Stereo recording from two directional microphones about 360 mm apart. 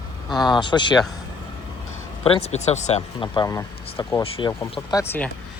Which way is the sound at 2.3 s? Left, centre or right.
Centre.